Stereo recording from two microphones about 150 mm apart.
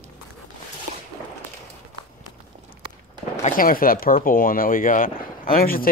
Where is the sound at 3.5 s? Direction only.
70° left (ahead or behind).